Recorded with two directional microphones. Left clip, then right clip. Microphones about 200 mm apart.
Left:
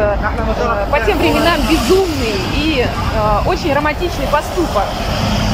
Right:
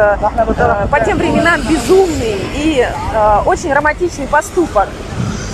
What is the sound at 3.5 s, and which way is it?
Speech, centre (ahead or behind).